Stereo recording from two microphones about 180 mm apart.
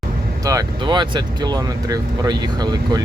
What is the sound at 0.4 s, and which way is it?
Speech, 20° right (ahead or behind).